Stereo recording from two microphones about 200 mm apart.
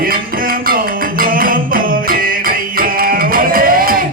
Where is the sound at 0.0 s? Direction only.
45° right (ahead or behind).